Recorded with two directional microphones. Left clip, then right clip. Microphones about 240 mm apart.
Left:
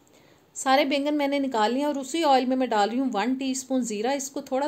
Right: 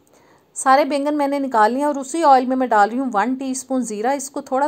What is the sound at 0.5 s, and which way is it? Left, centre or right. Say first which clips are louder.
A woman's voice: right 7 dB; centre.